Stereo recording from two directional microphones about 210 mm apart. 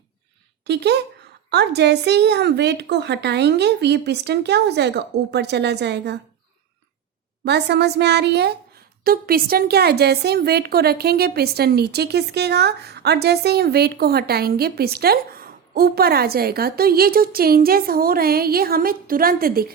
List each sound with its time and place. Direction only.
0.6 s a woman's voice: 55° right (ahead or behind)
7.4 s a woman's voice: 55° right (ahead or behind)